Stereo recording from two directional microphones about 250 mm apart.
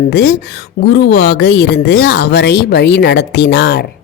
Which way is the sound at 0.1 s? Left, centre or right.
Left.